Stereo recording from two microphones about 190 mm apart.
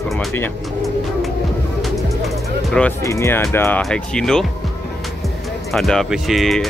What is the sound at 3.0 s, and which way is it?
Speech, 15° left (ahead or behind).